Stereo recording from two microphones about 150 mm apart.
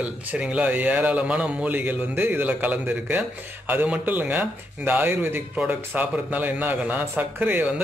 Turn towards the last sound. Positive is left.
turn(degrees=-10)  # may be behind; listen again after turning